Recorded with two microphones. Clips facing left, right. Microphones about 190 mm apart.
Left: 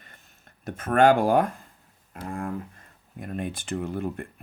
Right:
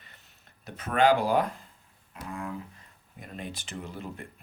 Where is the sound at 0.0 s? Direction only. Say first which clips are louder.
Left 4 dB; 50° left (ahead or behind).